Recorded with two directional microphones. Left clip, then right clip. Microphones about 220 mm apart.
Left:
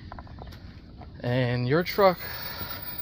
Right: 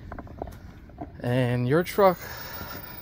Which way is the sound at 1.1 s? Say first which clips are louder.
Right 1 dB; 25° right (ahead or behind).